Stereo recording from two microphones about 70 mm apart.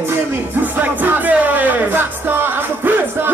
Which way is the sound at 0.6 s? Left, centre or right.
Right.